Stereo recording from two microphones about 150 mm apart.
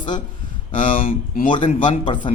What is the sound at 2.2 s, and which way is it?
Speech, 35° left (ahead or behind).